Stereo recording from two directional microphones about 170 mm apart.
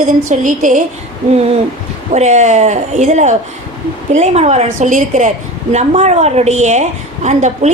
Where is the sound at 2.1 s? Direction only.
45° right (ahead or behind).